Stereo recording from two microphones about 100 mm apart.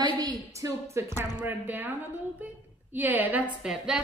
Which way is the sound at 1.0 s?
25° right (ahead or behind).